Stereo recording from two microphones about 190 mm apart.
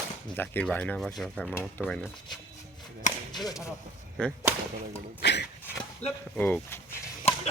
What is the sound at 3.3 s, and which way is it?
Whip, 20° left (ahead or behind).